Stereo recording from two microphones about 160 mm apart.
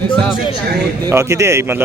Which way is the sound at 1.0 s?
15° right (ahead or behind).